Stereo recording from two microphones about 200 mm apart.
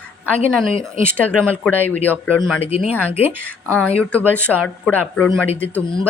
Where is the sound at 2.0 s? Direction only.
5° left (ahead or behind).